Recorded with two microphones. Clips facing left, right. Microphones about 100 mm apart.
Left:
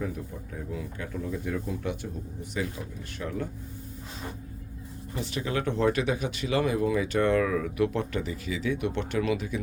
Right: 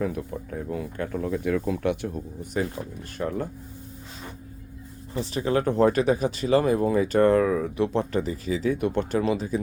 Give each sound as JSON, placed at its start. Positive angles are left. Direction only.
{"t": 0.0, "sound": "speech", "side_deg": -55}
{"t": 2.4, "sound": "speech", "side_deg": -45}
{"t": 5.1, "sound": "speech", "side_deg": -35}